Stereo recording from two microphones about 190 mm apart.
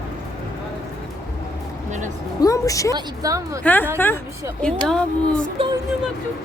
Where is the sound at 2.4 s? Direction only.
15° left (ahead or behind).